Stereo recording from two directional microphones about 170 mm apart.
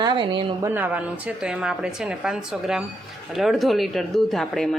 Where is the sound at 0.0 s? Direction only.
30° right (ahead or behind).